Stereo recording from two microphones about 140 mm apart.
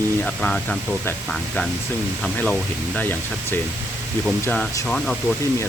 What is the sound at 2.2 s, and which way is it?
Speech, 5° left (ahead or behind).